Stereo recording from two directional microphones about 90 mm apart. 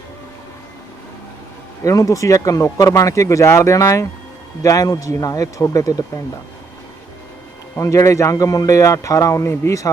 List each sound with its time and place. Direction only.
1.8 s speech: 40° left (ahead or behind)
7.8 s speech: 35° left (ahead or behind)